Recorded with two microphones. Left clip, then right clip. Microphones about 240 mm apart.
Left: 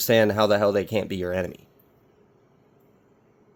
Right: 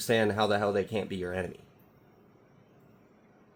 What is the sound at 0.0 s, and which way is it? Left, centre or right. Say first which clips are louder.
Speech: left 7 dB; left.